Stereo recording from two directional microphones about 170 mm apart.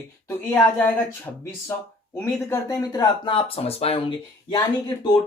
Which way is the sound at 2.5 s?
15° left (ahead or behind).